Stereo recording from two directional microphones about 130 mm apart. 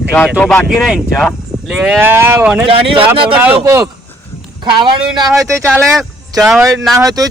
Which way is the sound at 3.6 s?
25° right (ahead or behind).